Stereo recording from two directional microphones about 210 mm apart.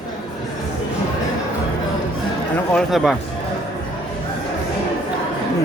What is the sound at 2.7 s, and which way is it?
Speech, centre (ahead or behind).